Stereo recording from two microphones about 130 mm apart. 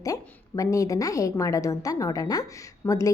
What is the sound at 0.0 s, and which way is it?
A woman's voice, 25° left (ahead or behind).